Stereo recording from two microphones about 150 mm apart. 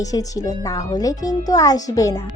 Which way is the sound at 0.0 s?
25° left (ahead or behind).